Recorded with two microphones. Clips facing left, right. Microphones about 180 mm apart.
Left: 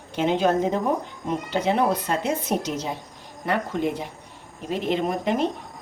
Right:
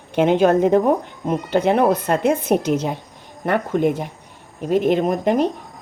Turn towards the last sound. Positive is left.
turn(degrees=-45)  # may be behind; listen again after turning